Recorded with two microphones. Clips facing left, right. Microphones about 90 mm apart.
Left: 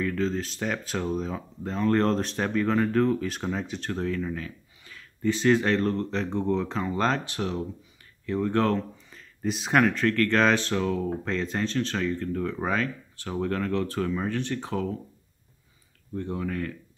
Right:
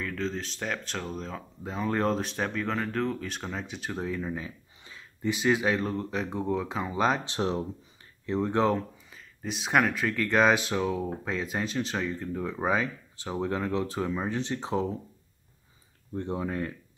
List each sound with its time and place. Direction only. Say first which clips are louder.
0.0 s speech: left 5 dB; centre (ahead or behind)
7.2 s speech: right 1 dB; 30° right (ahead or behind)
9.1 s speech: left 7 dB; centre (ahead or behind); by 14.9 s 20° right (ahead or behind)
16.2 s speech: even; 25° right (ahead or behind)